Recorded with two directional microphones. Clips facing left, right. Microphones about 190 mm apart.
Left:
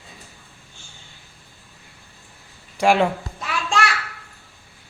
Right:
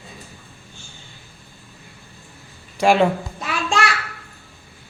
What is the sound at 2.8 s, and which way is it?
Speech, 10° left (ahead or behind).